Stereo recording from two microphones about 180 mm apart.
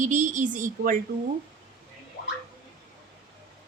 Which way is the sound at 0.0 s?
45° right (ahead or behind).